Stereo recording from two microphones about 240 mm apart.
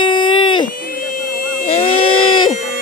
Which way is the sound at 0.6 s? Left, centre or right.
Left.